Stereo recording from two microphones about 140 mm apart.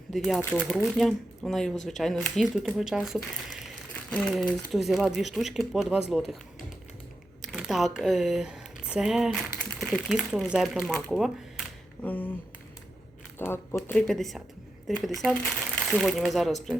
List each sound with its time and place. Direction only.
0.1 s speech: centre (ahead or behind)
7.4 s speech: 5° right (ahead or behind)
12.0 s a sound: 10° left (ahead or behind)
13.4 s speech: 15° left (ahead or behind)
13.9 s speech: centre (ahead or behind)